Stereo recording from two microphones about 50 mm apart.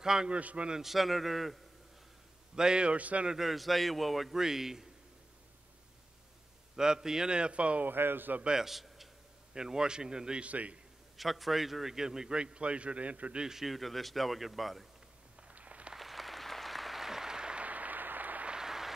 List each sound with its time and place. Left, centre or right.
0.0 s a man's voice: centre
0.3 s a man's voice: right
0.7 s a man's voice: centre
2.5 s a man's voice: centre
3.3 s a man's voice: centre
6.8 s a man's voice: centre
7.8 s speech: right
8.5 s a man's voice: centre; by 10.8 s right
11.1 s a man's voice: centre; by 13.4 s right
13.4 s a man's voice: centre
15.4 s a sound: right
15.9 s applause: centre
17.6 s a sound: right
18.5 s applause: centre